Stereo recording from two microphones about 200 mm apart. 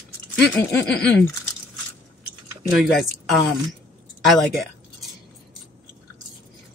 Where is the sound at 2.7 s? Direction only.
Centre (ahead or behind).